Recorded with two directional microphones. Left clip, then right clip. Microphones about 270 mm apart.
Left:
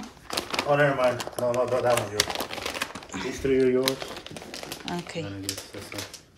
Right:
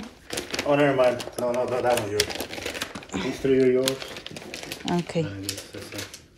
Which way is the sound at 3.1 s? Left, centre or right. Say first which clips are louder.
Right 3 dB; centre.